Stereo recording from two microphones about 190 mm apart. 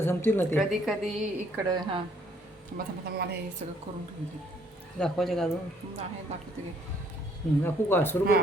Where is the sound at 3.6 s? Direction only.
35° right (ahead or behind).